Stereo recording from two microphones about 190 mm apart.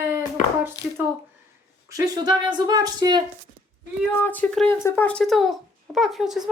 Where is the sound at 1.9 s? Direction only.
20° right (ahead or behind).